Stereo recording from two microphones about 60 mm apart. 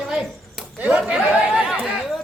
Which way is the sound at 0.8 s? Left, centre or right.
Centre.